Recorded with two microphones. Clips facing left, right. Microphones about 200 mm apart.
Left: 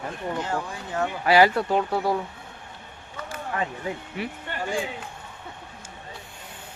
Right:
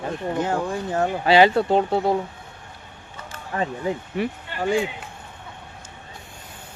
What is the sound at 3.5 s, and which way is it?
Speech, 35° right (ahead or behind).